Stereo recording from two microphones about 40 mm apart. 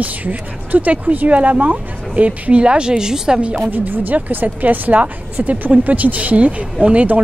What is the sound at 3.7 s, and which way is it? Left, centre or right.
A woman's voice, right.